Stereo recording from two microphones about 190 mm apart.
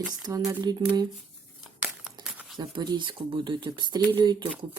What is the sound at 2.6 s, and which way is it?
Speech, 20° right (ahead or behind).